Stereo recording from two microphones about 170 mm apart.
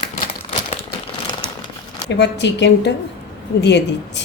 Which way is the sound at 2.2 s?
90° left.